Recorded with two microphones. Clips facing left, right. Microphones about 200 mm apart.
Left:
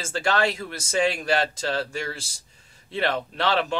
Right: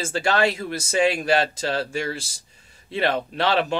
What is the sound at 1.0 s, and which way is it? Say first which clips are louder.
Speech: right 3 dB; 10° right (ahead or behind).